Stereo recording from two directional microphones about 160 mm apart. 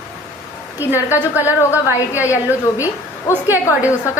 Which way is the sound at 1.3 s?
15° left (ahead or behind).